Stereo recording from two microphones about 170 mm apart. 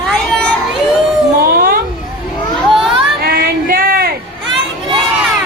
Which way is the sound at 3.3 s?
60° right (ahead or behind).